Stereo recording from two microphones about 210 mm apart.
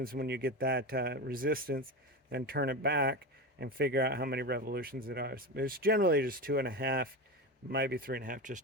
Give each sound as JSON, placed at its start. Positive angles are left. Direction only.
{"t": 0.0, "sound": "speech", "side_deg": -45}